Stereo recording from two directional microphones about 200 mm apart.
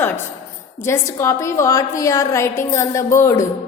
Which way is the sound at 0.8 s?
15° left (ahead or behind).